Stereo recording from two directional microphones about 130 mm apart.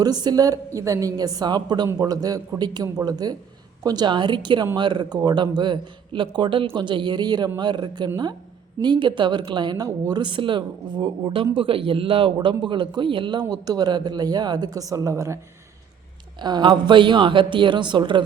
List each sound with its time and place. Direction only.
0.0 s a woman's voice: 30° right (ahead or behind)
16.4 s speech: 35° right (ahead or behind)